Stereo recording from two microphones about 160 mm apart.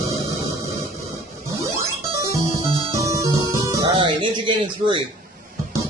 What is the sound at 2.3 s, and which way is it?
Music, 20° right (ahead or behind).